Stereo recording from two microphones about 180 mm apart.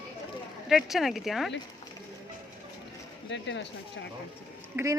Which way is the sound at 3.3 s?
90° left.